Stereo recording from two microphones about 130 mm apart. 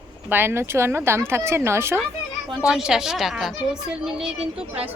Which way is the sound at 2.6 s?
5° right (ahead or behind).